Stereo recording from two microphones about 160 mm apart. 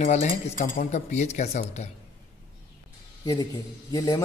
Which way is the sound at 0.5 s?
60° left (ahead or behind).